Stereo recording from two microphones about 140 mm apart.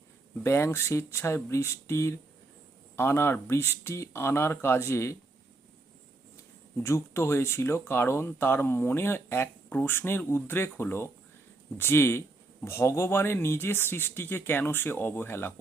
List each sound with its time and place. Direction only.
0.4 s speech: 20° left (ahead or behind)
6.8 s speech: 20° left (ahead or behind)